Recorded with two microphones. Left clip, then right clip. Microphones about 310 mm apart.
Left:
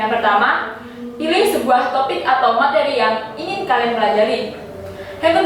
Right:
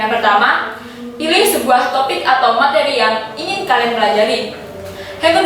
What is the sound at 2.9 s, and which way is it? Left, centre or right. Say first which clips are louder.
A woman's voice: right 2 dB; centre.